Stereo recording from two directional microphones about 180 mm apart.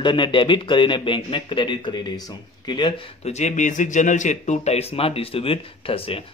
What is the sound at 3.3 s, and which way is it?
Speech, 40° left (ahead or behind).